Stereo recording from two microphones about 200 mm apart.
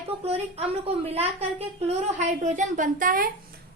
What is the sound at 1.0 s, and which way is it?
A child's voice, 30° right (ahead or behind).